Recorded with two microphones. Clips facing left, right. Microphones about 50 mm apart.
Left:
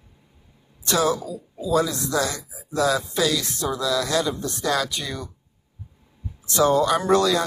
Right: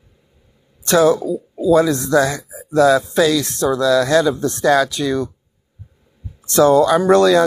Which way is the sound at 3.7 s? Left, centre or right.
Right.